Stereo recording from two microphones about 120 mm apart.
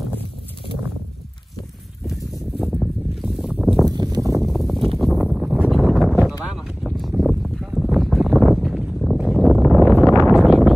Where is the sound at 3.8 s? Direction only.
35° right (ahead or behind).